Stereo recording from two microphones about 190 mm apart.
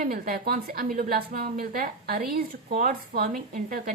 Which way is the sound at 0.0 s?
50° right (ahead or behind).